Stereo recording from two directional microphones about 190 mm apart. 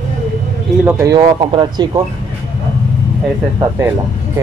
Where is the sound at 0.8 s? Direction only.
15° right (ahead or behind).